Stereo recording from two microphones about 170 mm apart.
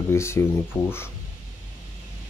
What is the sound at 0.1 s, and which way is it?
Speech, 15° left (ahead or behind).